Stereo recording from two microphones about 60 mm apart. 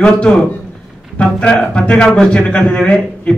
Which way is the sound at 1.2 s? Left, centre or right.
Centre.